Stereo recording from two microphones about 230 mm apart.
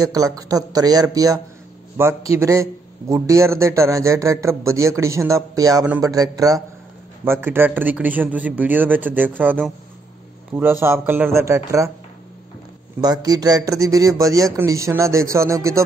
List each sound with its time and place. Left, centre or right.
0.0 s speech: centre
13.0 s speech: centre